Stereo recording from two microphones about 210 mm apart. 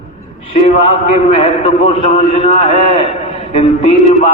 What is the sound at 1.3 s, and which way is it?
A man's voice, 30° left (ahead or behind).